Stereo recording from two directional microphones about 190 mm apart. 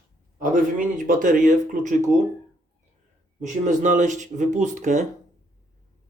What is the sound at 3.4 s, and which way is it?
Speech, 40° right (ahead or behind).